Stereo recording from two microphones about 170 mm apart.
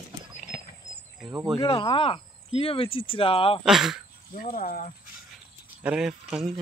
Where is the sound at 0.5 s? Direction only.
85° left.